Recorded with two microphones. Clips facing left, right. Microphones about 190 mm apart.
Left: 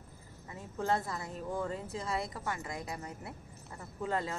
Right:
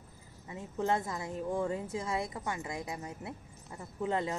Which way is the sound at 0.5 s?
25° right (ahead or behind).